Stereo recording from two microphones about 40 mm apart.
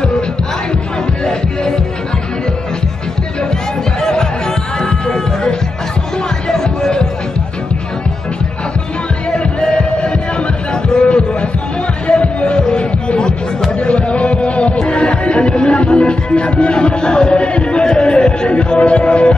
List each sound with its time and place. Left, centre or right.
1.2 s music: centre
4.0 s music: centre
9.3 s music: left